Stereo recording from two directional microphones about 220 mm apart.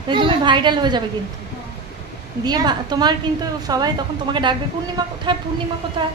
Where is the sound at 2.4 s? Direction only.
20° right (ahead or behind).